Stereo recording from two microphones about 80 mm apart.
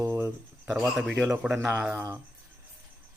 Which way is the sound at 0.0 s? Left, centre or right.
Right.